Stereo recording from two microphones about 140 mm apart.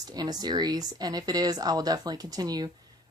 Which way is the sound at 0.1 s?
30° right (ahead or behind).